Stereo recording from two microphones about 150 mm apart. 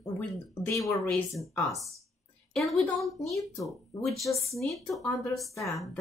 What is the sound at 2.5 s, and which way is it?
Speech, centre (ahead or behind).